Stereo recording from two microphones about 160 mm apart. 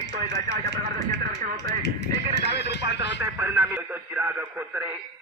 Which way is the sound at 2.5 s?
90° left.